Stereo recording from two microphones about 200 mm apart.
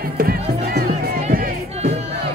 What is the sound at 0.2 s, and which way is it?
Music, 45° right (ahead or behind).